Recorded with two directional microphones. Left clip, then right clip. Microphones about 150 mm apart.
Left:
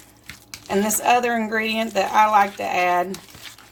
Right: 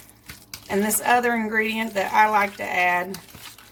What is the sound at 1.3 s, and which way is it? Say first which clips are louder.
Speech: left 1 dB; 35° left (ahead or behind).